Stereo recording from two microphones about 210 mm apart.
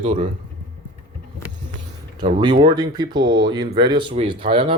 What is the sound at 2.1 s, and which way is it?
Speech, 20° right (ahead or behind).